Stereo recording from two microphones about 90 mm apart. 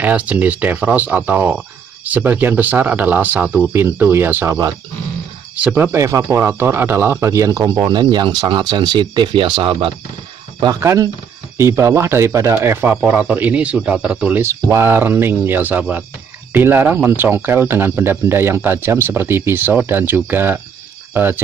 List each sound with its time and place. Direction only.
0.0 s speech: 15° right (ahead or behind)
5.6 s speech: 15° right (ahead or behind)
5.9 s speech: 35° right (ahead or behind)
7.9 s speech: 55° right (ahead or behind)
10.8 s speech: 35° right (ahead or behind)
13.0 s speech: 15° right (ahead or behind)
14.4 s speech: 30° right (ahead or behind)